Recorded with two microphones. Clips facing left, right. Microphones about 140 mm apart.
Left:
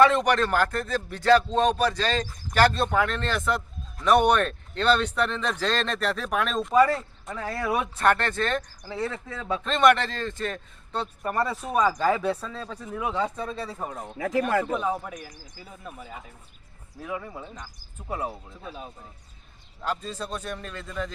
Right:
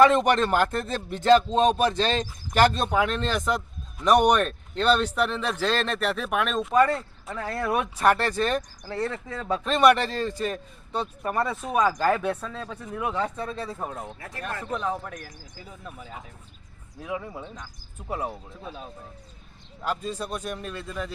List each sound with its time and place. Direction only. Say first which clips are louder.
0.3 s a man's voice: right 1 dB; 20° right (ahead or behind); by 14.1 s centre (ahead or behind)
14.2 s speech: left 11 dB; 90° left
14.7 s speech: left 2 dB; 5° left (ahead or behind)
17.0 s speech: right 1 dB; 10° right (ahead or behind)
19.8 s speech: right 1 dB; 10° right (ahead or behind)